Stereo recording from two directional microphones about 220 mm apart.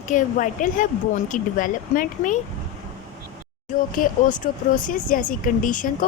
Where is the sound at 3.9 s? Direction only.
35° left (ahead or behind).